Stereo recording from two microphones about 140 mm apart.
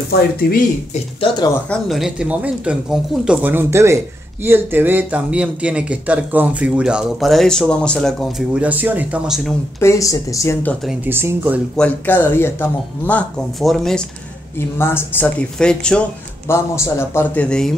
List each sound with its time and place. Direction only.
0.4 s speech: 90° left
1.7 s speech: centre (ahead or behind)
8.5 s speech: 10° right (ahead or behind)
9.8 s speech: 20° left (ahead or behind)
11.1 s speech: 15° right (ahead or behind)
11.7 s speech: 10° left (ahead or behind)
13.6 s speech: centre (ahead or behind)
14.8 s speech: 15° left (ahead or behind)
16.4 s speech: 20° left (ahead or behind)